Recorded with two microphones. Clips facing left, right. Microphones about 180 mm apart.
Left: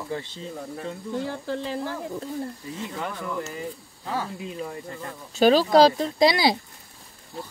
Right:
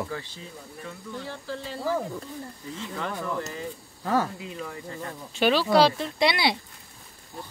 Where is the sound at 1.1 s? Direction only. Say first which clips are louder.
Left 6 dB; 50° left (ahead or behind).